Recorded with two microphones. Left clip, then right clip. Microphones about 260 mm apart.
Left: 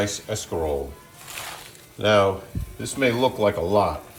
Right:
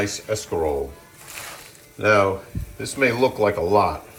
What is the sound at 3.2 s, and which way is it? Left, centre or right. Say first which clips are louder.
Speech: right 2 dB; centre.